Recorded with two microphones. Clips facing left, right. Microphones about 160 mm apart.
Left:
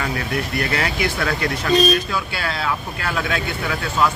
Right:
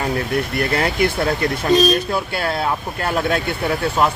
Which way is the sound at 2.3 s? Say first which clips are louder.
Right 4 dB; 50° right (ahead or behind).